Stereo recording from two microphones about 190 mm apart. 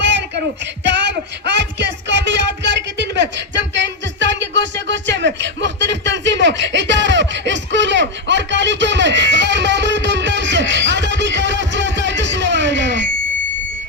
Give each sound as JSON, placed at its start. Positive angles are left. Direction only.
{"t": 0.0, "sound": "child singing", "side_deg": -65}
{"t": 1.5, "sound": "music", "side_deg": -70}